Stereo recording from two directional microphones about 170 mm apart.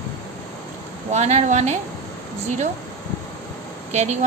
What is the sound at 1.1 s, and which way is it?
Speech, 40° right (ahead or behind).